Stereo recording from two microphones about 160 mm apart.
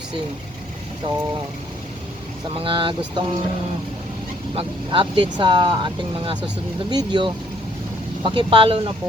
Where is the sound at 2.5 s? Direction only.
35° right (ahead or behind).